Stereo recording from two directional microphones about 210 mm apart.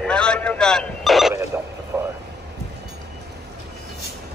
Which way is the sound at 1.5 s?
10° right (ahead or behind).